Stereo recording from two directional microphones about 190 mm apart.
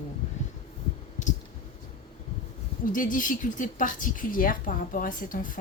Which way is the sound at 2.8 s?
45° left (ahead or behind).